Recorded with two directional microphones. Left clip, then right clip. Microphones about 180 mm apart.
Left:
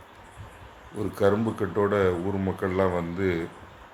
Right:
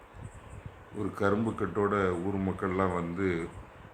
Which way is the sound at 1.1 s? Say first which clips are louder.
Left 6 dB; 15° left (ahead or behind).